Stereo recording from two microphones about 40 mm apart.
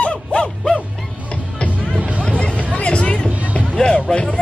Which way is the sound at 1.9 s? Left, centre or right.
Right.